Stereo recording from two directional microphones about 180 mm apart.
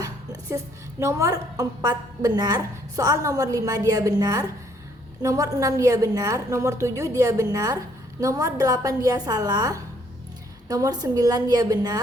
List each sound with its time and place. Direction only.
0.5 s a woman's voice: 15° right (ahead or behind)